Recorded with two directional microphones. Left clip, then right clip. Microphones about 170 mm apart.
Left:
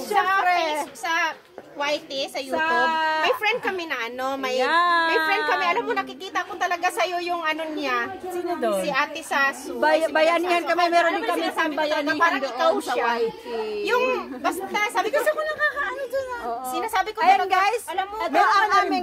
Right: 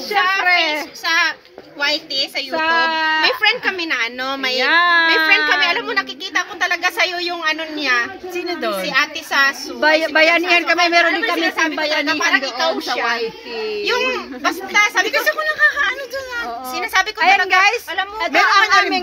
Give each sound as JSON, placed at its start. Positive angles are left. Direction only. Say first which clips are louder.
{"t": 0.1, "sound": "a sound", "louder": "right 5 dB", "side_deg": -10}
{"t": 1.8, "sound": "a woman's voice", "louder": "right 6 dB", "side_deg": 10}
{"t": 2.5, "sound": "speech", "louder": "right 4 dB", "side_deg": -15}
{"t": 3.3, "sound": "a woman's voice", "louder": "right 6 dB", "side_deg": 0}
{"t": 4.6, "sound": "speech", "louder": "right 7 dB", "side_deg": -10}
{"t": 5.5, "sound": "a woman's voice", "louder": "right 6 dB", "side_deg": 20}
{"t": 8.5, "sound": "a woman's voice", "louder": "right 1 dB", "side_deg": 25}
{"t": 8.8, "sound": "a woman's voice", "louder": "right 6 dB", "side_deg": 0}
{"t": 9.8, "sound": "speech", "louder": "right 5 dB", "side_deg": -10}
{"t": 14.1, "sound": "a woman's voice", "louder": "right 5 dB", "side_deg": 10}
{"t": 15.2, "sound": "a sound", "louder": "right 7 dB", "side_deg": 25}
{"t": 17.5, "sound": "speech", "louder": "right 7 dB", "side_deg": -10}